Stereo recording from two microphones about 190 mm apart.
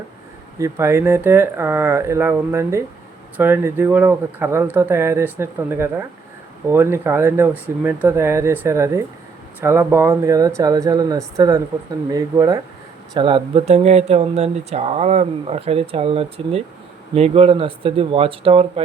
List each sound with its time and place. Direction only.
0.6 s speech: 15° right (ahead or behind); by 18.7 s 30° right (ahead or behind)